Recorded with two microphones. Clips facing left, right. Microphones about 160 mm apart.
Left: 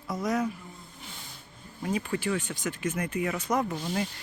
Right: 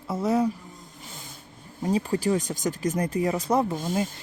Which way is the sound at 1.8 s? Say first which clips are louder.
Right 5 dB; 35° right (ahead or behind).